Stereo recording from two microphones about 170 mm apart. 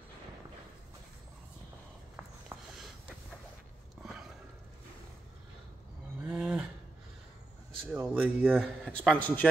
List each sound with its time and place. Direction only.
2.1 s a sound: centre (ahead or behind)
4.0 s sniff: 5° right (ahead or behind)
6.2 s livestock: 5° right (ahead or behind)
7.9 s speech: 10° right (ahead or behind)
8.4 s a man's voice: 5° left (ahead or behind)